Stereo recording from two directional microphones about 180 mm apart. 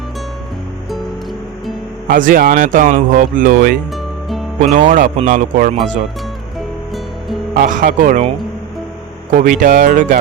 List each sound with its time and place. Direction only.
0.9 s music: centre (ahead or behind)
2.0 s speech: 50° right (ahead or behind)
3.9 s music: centre (ahead or behind)
4.6 s speech: 40° right (ahead or behind)
6.6 s music: centre (ahead or behind)
7.5 s speech: 45° right (ahead or behind)
9.3 s speech: 50° right (ahead or behind)